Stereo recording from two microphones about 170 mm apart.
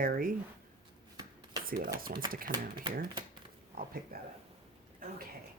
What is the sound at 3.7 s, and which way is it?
Speech, 60° right (ahead or behind).